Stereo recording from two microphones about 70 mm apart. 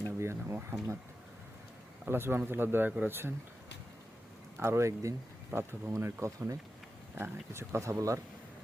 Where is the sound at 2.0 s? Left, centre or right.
Right.